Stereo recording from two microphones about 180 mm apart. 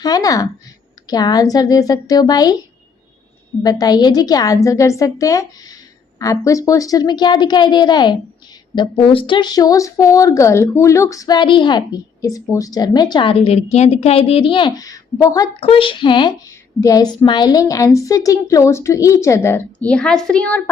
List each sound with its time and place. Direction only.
0.0 s speech: 20° left (ahead or behind)
3.6 s speech: 20° left (ahead or behind)
15.6 s a woman's voice: 30° left (ahead or behind); by 20.6 s 5° left (ahead or behind)